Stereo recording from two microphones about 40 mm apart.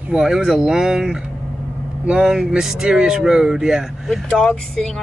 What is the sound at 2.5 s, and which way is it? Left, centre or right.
Speech, centre.